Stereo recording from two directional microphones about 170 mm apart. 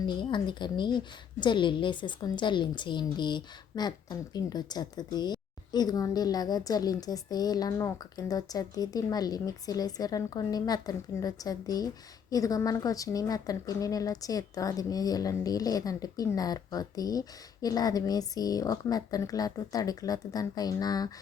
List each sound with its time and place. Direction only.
0.0 s a woman's voice: 25° left (ahead or behind)